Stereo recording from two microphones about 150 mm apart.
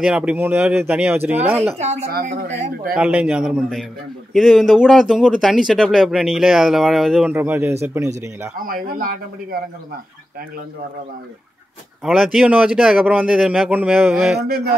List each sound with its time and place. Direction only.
0.0 s speech: 5° right (ahead or behind)
1.8 s a woman's voice: 50° right (ahead or behind)
3.0 s speech: 10° right (ahead or behind)
8.5 s speech: 70° right (ahead or behind)
12.0 s speech: centre (ahead or behind)